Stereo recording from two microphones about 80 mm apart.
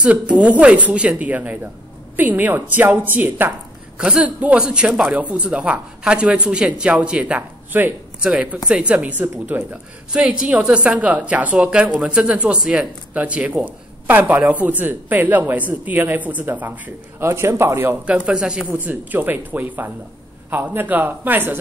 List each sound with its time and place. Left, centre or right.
0.4 s a woman's voice: centre
17.2 s a man's voice: right
18.0 s speech: centre
18.7 s a woman's voice: right